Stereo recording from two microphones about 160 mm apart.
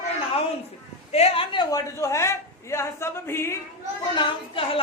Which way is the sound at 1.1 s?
40° left (ahead or behind).